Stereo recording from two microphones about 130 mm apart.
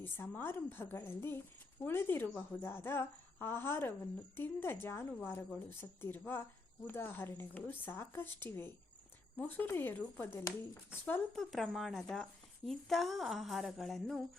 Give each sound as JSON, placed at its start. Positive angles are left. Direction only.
{"t": 0.0, "sound": "a woman's voice", "side_deg": 15}
{"t": 11.3, "sound": "speech", "side_deg": 0}